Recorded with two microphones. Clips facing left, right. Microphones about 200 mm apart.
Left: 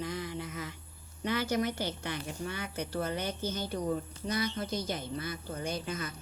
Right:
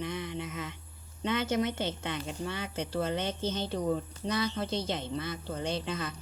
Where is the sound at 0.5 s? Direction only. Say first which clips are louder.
Right 1 dB; 20° right (ahead or behind).